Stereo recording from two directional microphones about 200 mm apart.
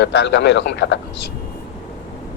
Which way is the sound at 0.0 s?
60° left (ahead or behind).